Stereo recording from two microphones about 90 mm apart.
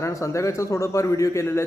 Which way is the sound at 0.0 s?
35° left (ahead or behind).